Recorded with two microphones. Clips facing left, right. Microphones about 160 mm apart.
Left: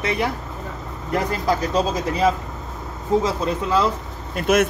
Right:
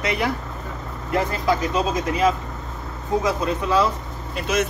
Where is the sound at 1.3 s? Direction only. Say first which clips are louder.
Even; 35° left (ahead or behind).